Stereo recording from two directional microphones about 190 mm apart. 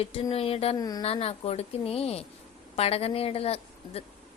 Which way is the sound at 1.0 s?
30° left (ahead or behind).